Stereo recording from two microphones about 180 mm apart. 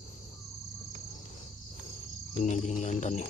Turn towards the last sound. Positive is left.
turn(degrees=40)  # may be behind; listen again after turning